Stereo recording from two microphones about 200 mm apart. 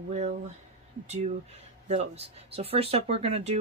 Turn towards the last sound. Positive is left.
turn(degrees=-30)  # may be behind; listen again after turning